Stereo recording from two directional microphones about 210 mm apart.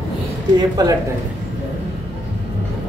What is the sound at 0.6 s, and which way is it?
Speech, 20° right (ahead or behind).